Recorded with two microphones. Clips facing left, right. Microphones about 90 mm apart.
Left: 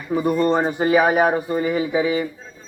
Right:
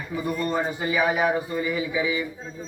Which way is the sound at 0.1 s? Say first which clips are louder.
Left 8 dB; 40° left (ahead or behind).